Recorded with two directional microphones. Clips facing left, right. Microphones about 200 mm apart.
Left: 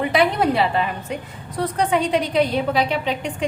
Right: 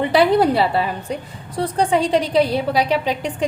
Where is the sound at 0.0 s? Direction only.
30° right (ahead or behind).